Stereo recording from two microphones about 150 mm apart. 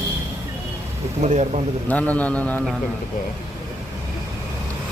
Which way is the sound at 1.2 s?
50° right (ahead or behind).